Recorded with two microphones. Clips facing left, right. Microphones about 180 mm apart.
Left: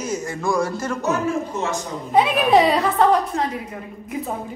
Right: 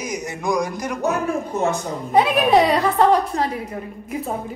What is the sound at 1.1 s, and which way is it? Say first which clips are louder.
Speech: even; 60° right (ahead or behind).